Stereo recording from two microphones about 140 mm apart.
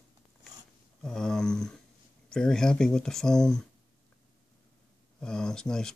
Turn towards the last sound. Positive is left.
turn(degrees=5)  # may be behind; listen again after turning